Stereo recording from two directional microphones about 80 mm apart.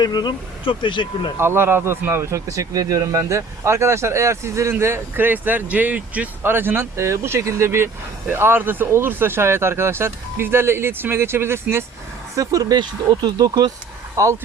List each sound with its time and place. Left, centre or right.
0.0 s speech: left
1.4 s speech: right
12.4 s speech: right
14.2 s speech: right